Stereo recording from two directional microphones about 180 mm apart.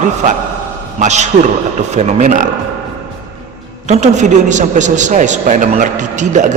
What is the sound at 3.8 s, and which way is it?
A man's voice, 40° right (ahead or behind).